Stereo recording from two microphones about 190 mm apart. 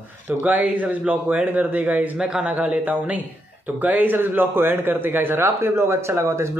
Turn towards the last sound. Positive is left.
turn(degrees=-15)  # may be behind; listen again after turning